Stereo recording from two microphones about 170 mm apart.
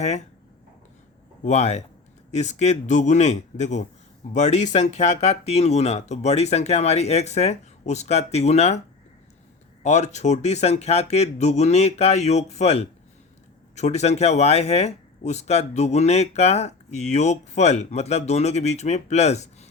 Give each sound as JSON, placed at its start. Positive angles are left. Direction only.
{"t": 1.5, "sound": "a man's voice", "side_deg": 40}
{"t": 9.8, "sound": "speech", "side_deg": 40}